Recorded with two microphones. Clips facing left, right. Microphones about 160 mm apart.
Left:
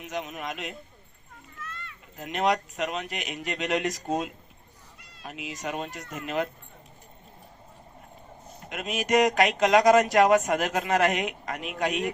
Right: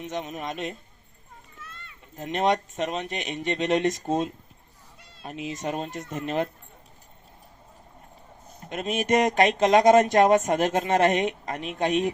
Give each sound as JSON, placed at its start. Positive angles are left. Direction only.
{"t": 0.0, "sound": "speech", "side_deg": -25}
{"t": 8.7, "sound": "speech", "side_deg": -25}